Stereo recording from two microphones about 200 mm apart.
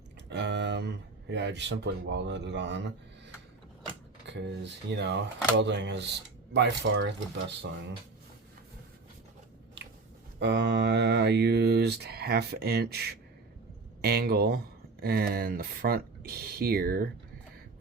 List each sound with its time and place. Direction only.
0.3 s speech: 60° right (ahead or behind)
4.3 s speech: 60° right (ahead or behind)
10.4 s speech: 60° right (ahead or behind)